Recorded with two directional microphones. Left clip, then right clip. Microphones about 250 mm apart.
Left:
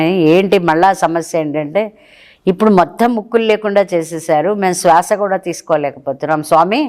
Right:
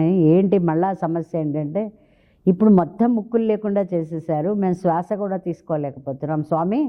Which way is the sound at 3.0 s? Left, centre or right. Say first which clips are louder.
Left 7 dB; centre.